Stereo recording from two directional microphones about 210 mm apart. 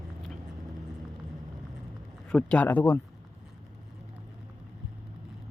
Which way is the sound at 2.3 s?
5° left (ahead or behind).